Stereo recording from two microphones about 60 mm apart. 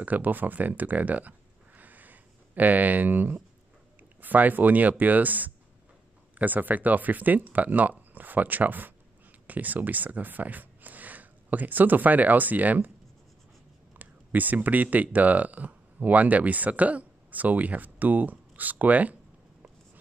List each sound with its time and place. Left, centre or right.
0.0 s speech: right
1.8 s a sound: right
4.2 s speech: right
13.9 s speech: right